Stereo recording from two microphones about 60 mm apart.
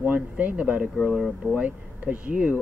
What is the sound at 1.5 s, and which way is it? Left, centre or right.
Speech, right.